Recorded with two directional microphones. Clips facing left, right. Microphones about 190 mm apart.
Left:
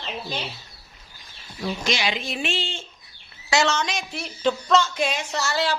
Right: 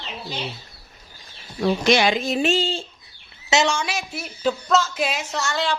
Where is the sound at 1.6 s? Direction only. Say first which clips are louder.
Right 8 dB; 55° right (ahead or behind); by 2.8 s 40° right (ahead or behind).